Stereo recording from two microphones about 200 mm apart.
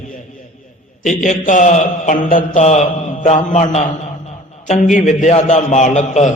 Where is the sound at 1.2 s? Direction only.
40° left (ahead or behind).